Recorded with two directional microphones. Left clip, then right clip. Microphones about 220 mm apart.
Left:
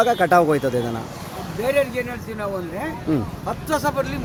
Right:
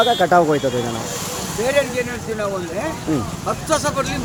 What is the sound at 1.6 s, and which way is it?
Speech, 50° left (ahead or behind).